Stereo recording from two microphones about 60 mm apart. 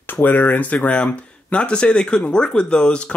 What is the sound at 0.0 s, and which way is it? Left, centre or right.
Speech, left.